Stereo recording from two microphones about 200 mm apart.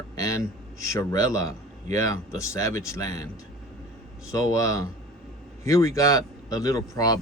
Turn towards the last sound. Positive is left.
turn(degrees=20)  # may be behind; listen again after turning